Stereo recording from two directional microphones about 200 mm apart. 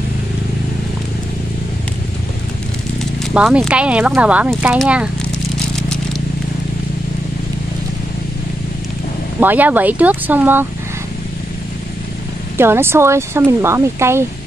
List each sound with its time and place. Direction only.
3.3 s speech: 5° right (ahead or behind)
9.4 s speech: 10° right (ahead or behind)
12.5 s speech: 10° right (ahead or behind)